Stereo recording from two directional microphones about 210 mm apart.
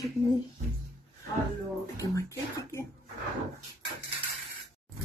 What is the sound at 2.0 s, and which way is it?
Speech, 15° left (ahead or behind).